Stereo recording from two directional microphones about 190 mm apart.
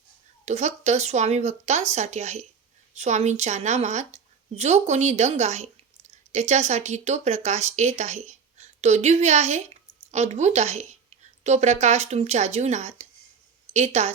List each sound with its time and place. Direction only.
0.4 s a woman's voice: 35° right (ahead or behind)